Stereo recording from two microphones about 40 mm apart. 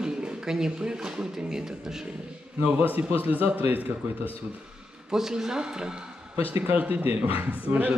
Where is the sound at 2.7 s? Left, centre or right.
Right.